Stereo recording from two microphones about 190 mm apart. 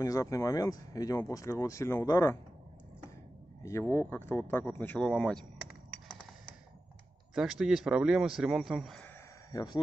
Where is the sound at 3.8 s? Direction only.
10° left (ahead or behind).